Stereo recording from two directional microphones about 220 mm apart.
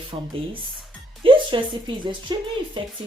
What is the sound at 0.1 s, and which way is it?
Speech, 25° right (ahead or behind).